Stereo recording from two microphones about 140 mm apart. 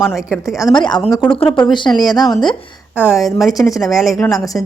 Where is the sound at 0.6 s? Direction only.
30° left (ahead or behind).